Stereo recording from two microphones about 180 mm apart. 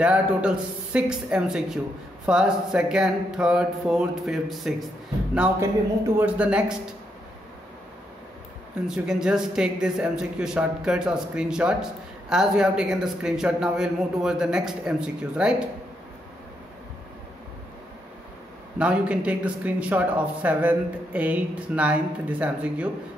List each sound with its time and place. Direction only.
0.0 s speech: 5° right (ahead or behind)
8.8 s speech: 5° right (ahead or behind)
18.8 s speech: 5° right (ahead or behind)